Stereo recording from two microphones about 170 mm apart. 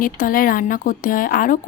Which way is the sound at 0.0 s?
55° left (ahead or behind).